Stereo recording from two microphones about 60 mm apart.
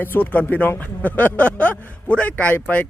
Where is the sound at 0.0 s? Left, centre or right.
Left.